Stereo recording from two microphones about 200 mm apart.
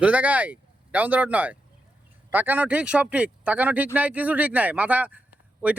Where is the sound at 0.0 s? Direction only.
5° right (ahead or behind).